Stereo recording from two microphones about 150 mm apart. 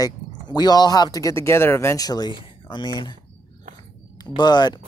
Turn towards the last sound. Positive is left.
turn(degrees=30)  # may be behind; listen again after turning